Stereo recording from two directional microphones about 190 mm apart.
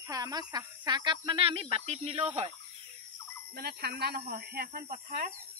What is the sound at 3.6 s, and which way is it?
Speech, 60° right (ahead or behind).